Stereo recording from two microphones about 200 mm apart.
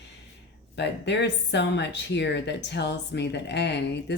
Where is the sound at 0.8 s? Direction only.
60° left (ahead or behind).